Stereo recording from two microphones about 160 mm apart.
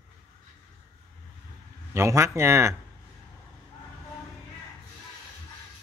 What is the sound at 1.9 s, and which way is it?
Speech, 15° right (ahead or behind).